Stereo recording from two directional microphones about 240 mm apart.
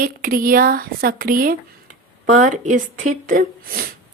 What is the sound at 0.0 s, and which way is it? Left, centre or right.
A woman's voice, right.